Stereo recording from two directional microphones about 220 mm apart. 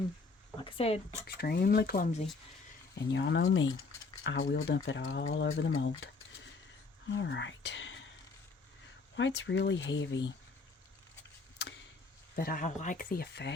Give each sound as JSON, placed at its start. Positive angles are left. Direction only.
{"t": 0.6, "sound": "speech", "side_deg": 25}
{"t": 1.4, "sound": "speech", "side_deg": 45}
{"t": 2.9, "sound": "speech", "side_deg": 55}
{"t": 7.1, "sound": "speech", "side_deg": 55}
{"t": 9.1, "sound": "speech", "side_deg": 55}
{"t": 12.4, "sound": "speech", "side_deg": 40}